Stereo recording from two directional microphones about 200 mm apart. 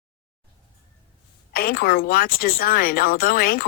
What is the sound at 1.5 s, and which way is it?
Speech, 45° left (ahead or behind).